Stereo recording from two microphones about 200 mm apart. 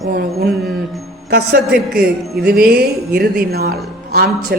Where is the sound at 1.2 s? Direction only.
55° right (ahead or behind).